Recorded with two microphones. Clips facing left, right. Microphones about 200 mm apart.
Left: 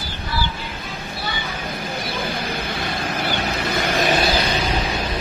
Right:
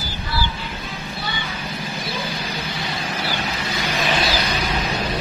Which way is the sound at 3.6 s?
50° left (ahead or behind).